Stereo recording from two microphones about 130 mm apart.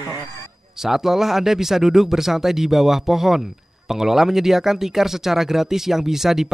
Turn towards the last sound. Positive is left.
turn(degrees=-5)  # may be behind; listen again after turning